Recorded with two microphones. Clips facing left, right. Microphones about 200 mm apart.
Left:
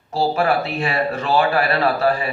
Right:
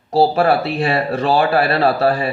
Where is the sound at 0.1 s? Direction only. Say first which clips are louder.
Right 5 dB; 35° right (ahead or behind).